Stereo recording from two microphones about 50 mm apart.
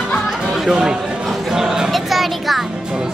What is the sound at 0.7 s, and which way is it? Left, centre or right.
Speech, centre.